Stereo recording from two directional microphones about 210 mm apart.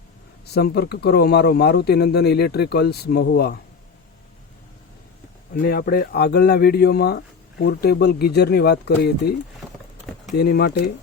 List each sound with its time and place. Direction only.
0.4 s speech: 50° left (ahead or behind)
5.6 s speech: 45° left (ahead or behind)
10.3 s speech: 50° left (ahead or behind)